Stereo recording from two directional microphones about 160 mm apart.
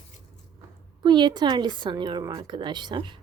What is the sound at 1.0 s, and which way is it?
Speech, 30° right (ahead or behind).